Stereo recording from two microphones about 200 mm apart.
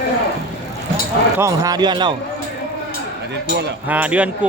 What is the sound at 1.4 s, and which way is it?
Speech, 15° right (ahead or behind).